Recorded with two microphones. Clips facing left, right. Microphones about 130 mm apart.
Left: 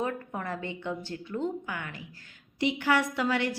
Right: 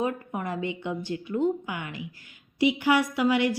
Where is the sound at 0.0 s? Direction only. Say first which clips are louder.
Right 3 dB; 15° right (ahead or behind).